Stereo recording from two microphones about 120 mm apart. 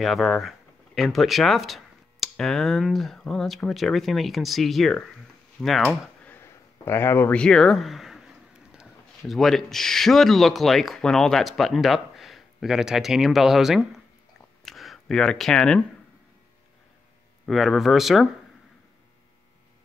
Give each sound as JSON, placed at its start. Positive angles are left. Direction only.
{"t": 0.0, "sound": "speech", "side_deg": 0}
{"t": 6.2, "sound": "a sound", "side_deg": 20}
{"t": 7.3, "sound": "speech", "side_deg": 5}
{"t": 17.5, "sound": "speech", "side_deg": 0}